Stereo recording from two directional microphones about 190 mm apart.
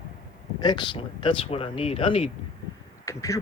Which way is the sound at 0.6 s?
25° left (ahead or behind).